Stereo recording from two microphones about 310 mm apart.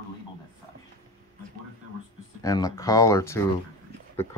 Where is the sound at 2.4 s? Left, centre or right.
Centre.